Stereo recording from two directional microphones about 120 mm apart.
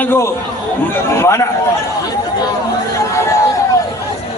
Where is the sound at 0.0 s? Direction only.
20° left (ahead or behind).